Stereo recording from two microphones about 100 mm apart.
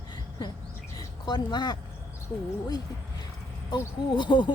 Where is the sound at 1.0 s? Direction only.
45° left (ahead or behind).